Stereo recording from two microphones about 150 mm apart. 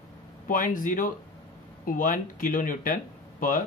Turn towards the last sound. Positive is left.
turn(degrees=65)  # may be behind; listen again after turning